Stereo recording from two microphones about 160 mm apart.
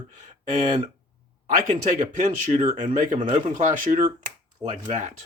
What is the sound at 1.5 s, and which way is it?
Speech, 55° right (ahead or behind).